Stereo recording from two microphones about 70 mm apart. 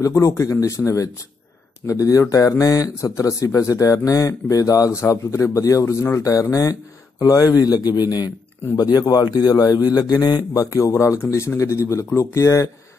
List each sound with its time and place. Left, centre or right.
0.0 s speech: left
7.2 s a man's voice: left